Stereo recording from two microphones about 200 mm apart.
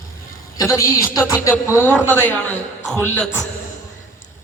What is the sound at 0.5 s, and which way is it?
A man's voice, 15° left (ahead or behind).